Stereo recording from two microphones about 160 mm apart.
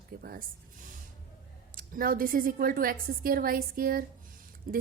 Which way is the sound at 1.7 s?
60° right (ahead or behind).